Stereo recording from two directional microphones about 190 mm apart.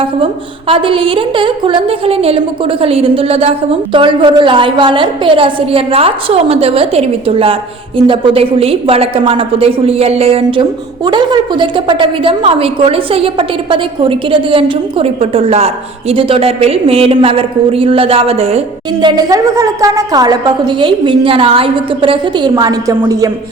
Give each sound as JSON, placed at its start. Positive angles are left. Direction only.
{"t": 0.7, "sound": "a woman's voice", "side_deg": -25}
{"t": 19.0, "sound": "a woman's voice", "side_deg": -20}